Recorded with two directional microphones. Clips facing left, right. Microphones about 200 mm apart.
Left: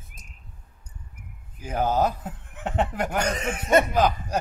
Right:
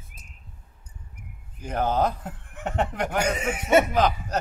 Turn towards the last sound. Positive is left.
turn(degrees=-10)  # may be behind; listen again after turning